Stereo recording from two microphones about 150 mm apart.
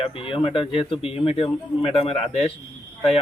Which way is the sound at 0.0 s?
35° left (ahead or behind).